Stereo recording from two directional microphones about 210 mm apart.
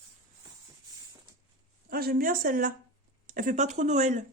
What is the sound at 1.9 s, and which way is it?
Speech, 45° right (ahead or behind).